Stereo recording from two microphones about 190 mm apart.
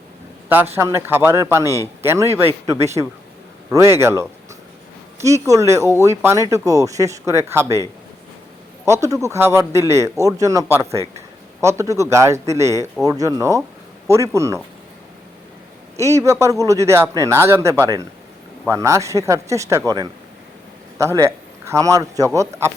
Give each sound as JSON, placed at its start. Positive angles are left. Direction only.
{"t": 0.4, "sound": "a man's voice", "side_deg": -10}
{"t": 3.7, "sound": "a man's voice", "side_deg": -15}
{"t": 8.9, "sound": "a man's voice", "side_deg": -15}
{"t": 16.0, "sound": "a man's voice", "side_deg": -15}
{"t": 21.0, "sound": "a man's voice", "side_deg": -15}